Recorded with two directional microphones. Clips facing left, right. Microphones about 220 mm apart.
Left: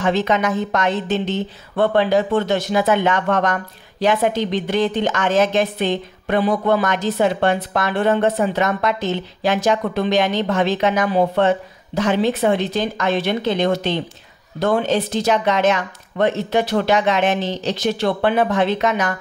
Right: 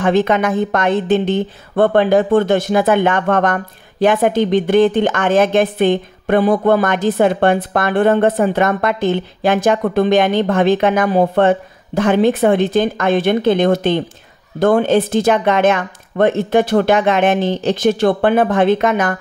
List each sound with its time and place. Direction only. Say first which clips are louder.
0.0 s a woman's voice: right 4 dB; 55° right (ahead or behind)